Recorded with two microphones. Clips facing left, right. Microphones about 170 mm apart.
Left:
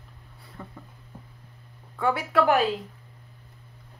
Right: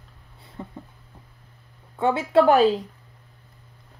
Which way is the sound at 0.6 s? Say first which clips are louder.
Right 5 dB; 20° right (ahead or behind).